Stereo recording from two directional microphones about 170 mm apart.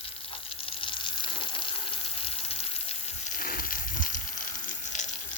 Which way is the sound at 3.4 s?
55° left (ahead or behind).